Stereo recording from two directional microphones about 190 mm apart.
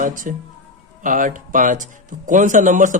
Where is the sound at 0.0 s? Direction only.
45° right (ahead or behind).